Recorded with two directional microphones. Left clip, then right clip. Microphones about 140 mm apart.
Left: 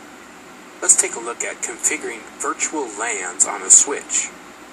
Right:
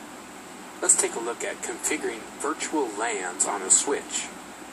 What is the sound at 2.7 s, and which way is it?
Speech, 15° left (ahead or behind).